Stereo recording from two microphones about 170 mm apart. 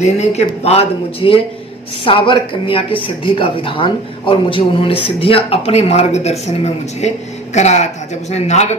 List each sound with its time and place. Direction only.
0.0 s a man's voice: 40° left (ahead or behind)